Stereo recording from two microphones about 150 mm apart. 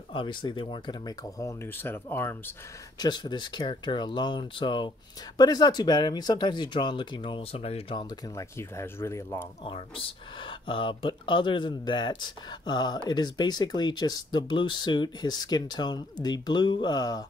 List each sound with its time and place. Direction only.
0.1 s speech: 30° left (ahead or behind); by 2.5 s 15° left (ahead or behind)
3.0 s speech: 30° left (ahead or behind)
8.4 s speech: 20° left (ahead or behind)
9.7 s speech: 40° left (ahead or behind)